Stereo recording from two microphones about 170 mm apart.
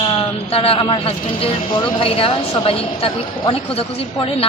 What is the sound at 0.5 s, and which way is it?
A man's voice, 35° left (ahead or behind).